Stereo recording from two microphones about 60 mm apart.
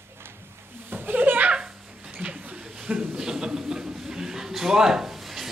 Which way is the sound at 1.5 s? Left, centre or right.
Centre.